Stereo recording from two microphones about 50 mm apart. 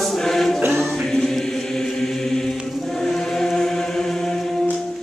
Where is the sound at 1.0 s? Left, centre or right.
Centre.